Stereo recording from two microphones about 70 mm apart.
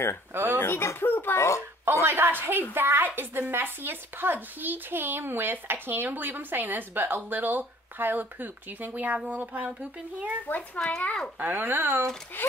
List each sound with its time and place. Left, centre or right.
0.3 s speech: right
0.6 s a child's voice: left
2.0 s a woman's voice: right
10.9 s a child's voice: centre
11.3 s speech: right
12.4 s speech: left